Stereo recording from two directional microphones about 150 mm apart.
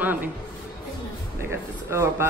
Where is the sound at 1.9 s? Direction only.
20° right (ahead or behind).